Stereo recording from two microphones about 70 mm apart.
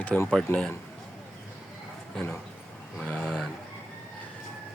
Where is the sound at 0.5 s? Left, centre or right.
Left.